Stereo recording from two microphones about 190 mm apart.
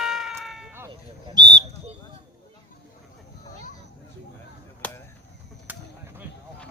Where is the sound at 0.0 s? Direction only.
Centre (ahead or behind).